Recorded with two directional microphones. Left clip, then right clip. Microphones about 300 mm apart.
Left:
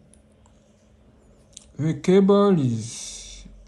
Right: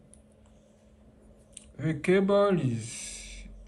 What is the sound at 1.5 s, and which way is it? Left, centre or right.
Speech, centre.